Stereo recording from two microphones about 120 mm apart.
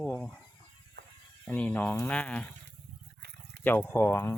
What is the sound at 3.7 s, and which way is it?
Speech, 15° left (ahead or behind).